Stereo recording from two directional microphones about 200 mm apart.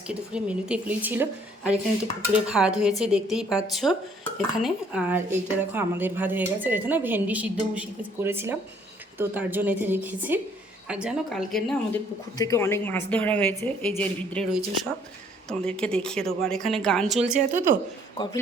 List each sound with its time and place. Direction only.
0.1 s speech: 5° right (ahead or behind)
12.4 s speech: 15° left (ahead or behind)
15.4 s speech: 5° left (ahead or behind); by 17.7 s 10° right (ahead or behind)